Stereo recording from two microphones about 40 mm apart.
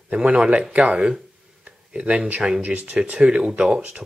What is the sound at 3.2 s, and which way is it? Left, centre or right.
Speech, right.